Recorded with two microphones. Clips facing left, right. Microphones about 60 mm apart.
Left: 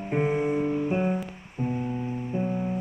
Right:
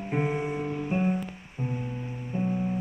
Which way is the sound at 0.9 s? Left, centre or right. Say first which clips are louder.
Left 1 dB; left.